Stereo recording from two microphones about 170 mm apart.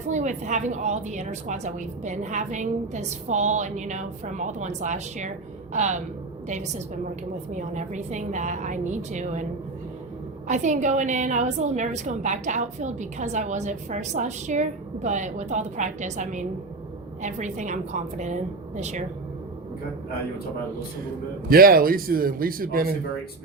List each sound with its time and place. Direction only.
0.1 s a woman's voice: 45° right (ahead or behind)
10.5 s a woman's voice: 45° right (ahead or behind)
21.5 s speech: 60° right (ahead or behind)